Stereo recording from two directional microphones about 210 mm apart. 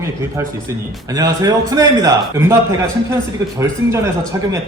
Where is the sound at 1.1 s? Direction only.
15° right (ahead or behind).